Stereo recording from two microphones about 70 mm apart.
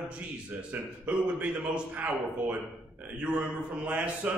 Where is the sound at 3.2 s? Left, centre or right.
Centre.